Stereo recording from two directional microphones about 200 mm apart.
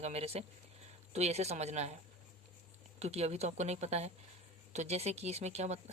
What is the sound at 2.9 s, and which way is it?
Speech, 30° right (ahead or behind).